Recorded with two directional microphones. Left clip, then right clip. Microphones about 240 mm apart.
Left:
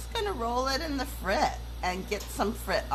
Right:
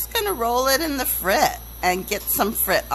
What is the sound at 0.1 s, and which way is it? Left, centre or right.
Speech, right.